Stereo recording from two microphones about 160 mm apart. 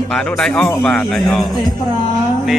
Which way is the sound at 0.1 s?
5° left (ahead or behind).